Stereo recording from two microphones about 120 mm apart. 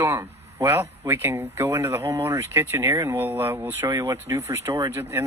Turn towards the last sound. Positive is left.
turn(degrees=-20)  # may be behind; listen again after turning